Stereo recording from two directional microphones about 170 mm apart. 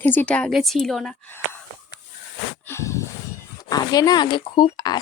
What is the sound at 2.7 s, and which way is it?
Speech, 15° left (ahead or behind).